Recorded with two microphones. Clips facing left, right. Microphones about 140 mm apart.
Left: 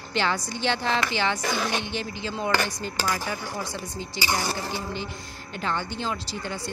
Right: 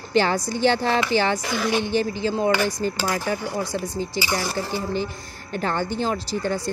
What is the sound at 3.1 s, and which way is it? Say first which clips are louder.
Speech: right 4 dB; 50° right (ahead or behind).